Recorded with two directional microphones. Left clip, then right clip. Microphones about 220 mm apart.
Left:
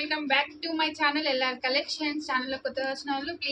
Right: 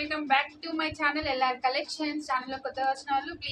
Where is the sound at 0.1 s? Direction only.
15° right (ahead or behind).